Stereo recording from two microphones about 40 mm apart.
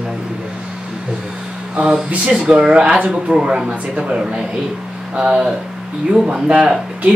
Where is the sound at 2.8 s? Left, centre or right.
Right.